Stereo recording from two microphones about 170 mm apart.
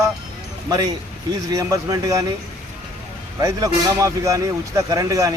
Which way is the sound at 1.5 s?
20° right (ahead or behind).